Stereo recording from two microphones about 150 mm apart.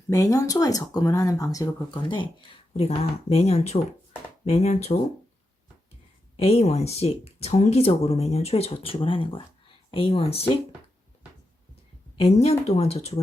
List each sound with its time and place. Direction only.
0.1 s speech: 20° left (ahead or behind)
2.7 s speech: 45° left (ahead or behind)
6.3 s speech: 40° left (ahead or behind)
12.1 s speech: 40° left (ahead or behind)